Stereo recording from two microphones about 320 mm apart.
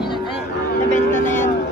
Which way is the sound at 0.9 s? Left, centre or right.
Left.